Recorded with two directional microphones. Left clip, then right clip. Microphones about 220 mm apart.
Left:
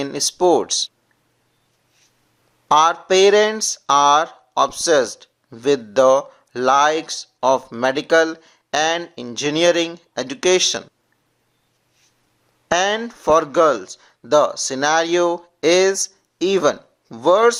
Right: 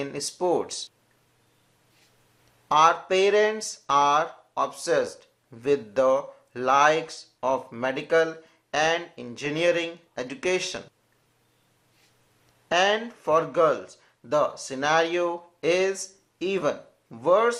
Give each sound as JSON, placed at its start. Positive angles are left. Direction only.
{"t": 0.0, "sound": "speech", "side_deg": 40}
{"t": 2.6, "sound": "speech", "side_deg": 40}
{"t": 12.6, "sound": "speech", "side_deg": 40}